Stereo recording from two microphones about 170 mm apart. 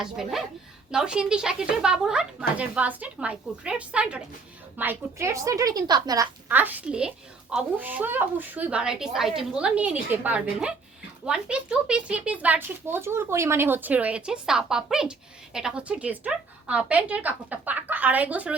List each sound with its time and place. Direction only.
0.0 s a woman's voice: centre (ahead or behind); by 6.2 s 20° right (ahead or behind)
6.5 s speech: 10° right (ahead or behind)